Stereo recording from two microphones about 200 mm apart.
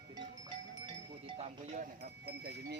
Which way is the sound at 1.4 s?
35° right (ahead or behind).